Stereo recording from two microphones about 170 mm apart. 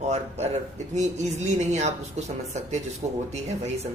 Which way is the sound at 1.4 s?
45° right (ahead or behind).